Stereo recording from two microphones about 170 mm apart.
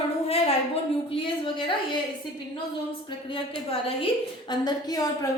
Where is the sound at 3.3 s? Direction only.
30° left (ahead or behind).